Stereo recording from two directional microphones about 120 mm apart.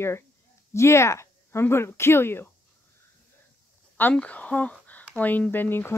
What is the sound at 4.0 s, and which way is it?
Speech, 15° left (ahead or behind).